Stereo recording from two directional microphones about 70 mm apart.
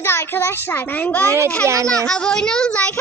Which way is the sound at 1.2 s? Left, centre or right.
Right.